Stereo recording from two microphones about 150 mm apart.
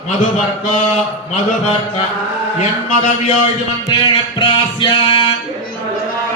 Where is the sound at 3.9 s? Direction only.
30° left (ahead or behind).